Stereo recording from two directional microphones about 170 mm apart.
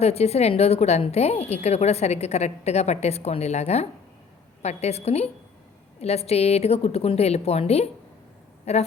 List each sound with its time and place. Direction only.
0.0 s a woman's voice: 40° left (ahead or behind)